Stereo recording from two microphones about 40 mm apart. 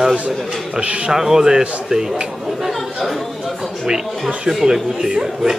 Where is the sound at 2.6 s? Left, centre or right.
Centre.